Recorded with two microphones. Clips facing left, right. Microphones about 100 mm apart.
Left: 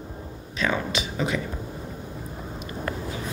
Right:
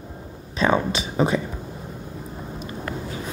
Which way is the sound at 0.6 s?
30° right (ahead or behind).